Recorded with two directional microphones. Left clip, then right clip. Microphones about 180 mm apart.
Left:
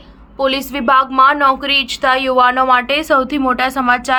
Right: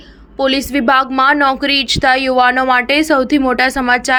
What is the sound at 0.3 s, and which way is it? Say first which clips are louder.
A woman's voice: right 2 dB; 20° right (ahead or behind).